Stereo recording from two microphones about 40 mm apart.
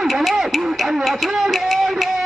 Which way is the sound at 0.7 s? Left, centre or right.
Centre.